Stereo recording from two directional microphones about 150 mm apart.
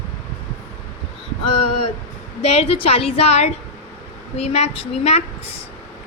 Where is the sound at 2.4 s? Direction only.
40° left (ahead or behind).